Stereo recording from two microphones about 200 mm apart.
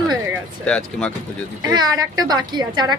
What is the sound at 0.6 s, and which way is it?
Speech, 5° left (ahead or behind).